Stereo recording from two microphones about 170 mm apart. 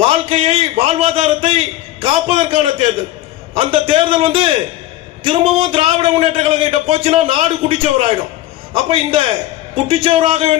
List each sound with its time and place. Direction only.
0.0 s a man's voice: 35° right (ahead or behind)